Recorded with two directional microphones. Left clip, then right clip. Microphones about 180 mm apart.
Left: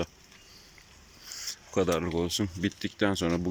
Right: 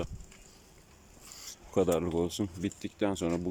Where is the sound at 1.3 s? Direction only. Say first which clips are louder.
Left 8 dB; 10° right (ahead or behind).